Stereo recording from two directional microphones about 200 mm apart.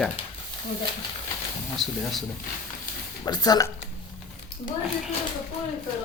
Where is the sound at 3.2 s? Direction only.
20° left (ahead or behind).